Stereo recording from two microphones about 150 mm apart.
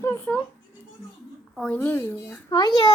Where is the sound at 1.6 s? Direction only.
10° left (ahead or behind).